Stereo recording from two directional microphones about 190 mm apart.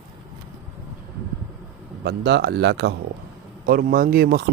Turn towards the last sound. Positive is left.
turn(degrees=-50)  # may be behind; listen again after turning